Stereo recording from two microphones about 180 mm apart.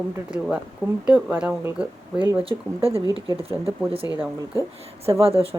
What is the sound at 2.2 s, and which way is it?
Speech, 30° right (ahead or behind).